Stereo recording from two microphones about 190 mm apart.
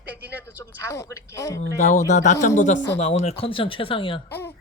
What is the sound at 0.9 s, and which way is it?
Speech, 15° left (ahead or behind).